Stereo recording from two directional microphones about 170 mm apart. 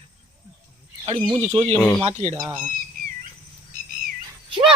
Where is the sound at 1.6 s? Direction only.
10° left (ahead or behind).